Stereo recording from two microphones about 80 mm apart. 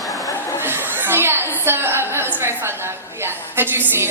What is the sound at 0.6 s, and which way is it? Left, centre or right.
A woman's voice, right.